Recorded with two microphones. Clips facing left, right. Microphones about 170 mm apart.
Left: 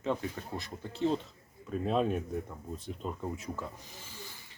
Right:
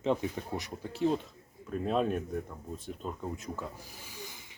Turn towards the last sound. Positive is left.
turn(degrees=-15)  # may be behind; listen again after turning